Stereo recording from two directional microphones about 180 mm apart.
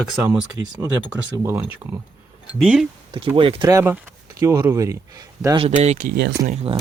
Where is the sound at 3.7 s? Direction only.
15° right (ahead or behind).